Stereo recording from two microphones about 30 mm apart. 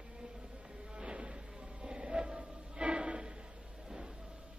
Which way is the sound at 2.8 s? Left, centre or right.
Right.